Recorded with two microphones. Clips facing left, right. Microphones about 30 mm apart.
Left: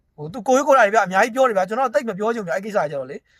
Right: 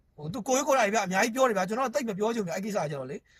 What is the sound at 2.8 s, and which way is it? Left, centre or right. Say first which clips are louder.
Speech: left 10 dB; left.